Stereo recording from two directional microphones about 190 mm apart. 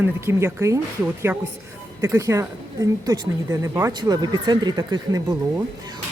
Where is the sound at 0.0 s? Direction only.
15° right (ahead or behind).